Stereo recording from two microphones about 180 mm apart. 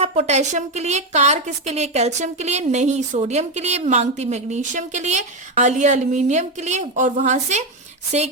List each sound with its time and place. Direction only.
0.0 s a woman's voice: 35° right (ahead or behind)